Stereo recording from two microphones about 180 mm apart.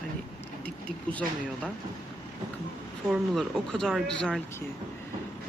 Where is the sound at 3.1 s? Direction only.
Centre (ahead or behind).